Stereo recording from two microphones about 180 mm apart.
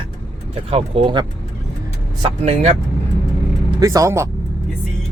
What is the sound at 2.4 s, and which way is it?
Speech, 40° right (ahead or behind).